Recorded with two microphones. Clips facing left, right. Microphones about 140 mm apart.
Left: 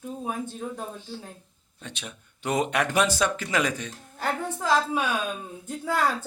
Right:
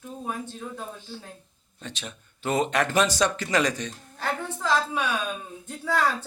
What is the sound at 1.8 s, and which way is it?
Speech, 10° left (ahead or behind).